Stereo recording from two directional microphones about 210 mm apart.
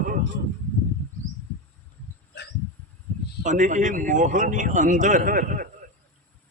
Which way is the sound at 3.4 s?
35° right (ahead or behind).